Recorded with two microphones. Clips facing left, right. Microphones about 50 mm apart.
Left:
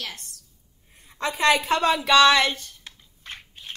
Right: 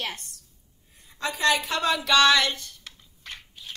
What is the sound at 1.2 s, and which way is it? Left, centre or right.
Speech, left.